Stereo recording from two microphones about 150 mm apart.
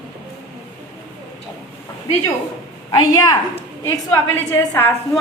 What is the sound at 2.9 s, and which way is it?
A woman's voice, 25° left (ahead or behind).